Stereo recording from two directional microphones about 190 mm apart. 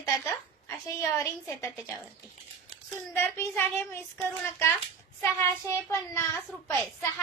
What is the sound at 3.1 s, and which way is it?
A woman's voice, 15° left (ahead or behind).